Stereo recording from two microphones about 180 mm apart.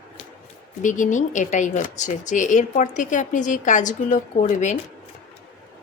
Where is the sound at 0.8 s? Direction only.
45° left (ahead or behind).